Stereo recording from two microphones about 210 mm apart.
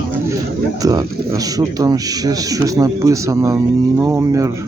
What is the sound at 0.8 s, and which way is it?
Speech, 15° right (ahead or behind).